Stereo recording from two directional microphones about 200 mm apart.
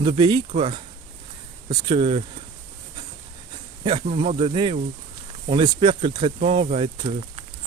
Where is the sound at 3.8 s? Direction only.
25° right (ahead or behind).